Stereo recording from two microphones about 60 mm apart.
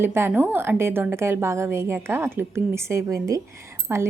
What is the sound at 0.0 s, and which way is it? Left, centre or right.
A woman's voice, right.